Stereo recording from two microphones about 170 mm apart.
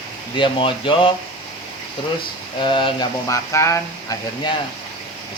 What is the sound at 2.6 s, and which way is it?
Speech, 30° left (ahead or behind).